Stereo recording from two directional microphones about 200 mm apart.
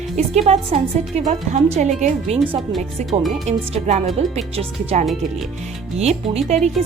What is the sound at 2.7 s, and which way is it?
Speech, centre (ahead or behind).